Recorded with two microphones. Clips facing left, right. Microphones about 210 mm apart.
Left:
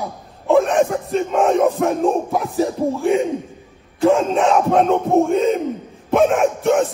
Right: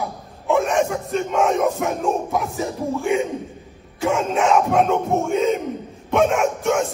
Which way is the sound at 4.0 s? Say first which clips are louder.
Left 6 dB; 35° left (ahead or behind).